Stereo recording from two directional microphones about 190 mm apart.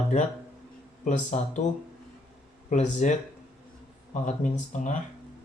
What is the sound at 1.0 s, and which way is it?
Speech, 40° left (ahead or behind).